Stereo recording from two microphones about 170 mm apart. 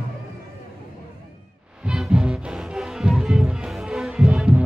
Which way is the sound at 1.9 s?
5° right (ahead or behind).